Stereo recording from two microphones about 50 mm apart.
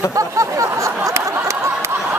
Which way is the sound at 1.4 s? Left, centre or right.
Right.